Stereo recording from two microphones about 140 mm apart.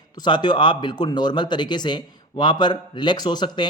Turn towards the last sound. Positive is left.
turn(degrees=30)  # may be behind; listen again after turning